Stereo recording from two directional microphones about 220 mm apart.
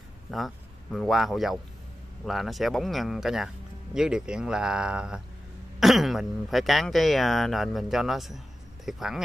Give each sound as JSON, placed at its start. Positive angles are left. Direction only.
{"t": 0.9, "sound": "speech", "side_deg": 0}